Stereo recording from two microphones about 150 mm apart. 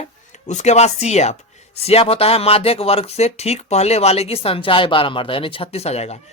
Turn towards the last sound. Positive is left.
turn(degrees=45)  # may be behind; listen again after turning